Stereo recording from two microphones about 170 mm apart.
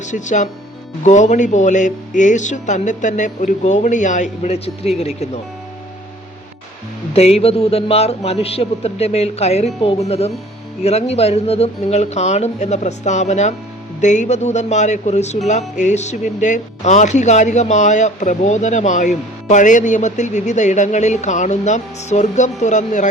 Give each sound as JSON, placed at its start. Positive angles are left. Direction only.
{"t": 0.0, "sound": "speech", "side_deg": 45}
{"t": 7.1, "sound": "a man's voice", "side_deg": 35}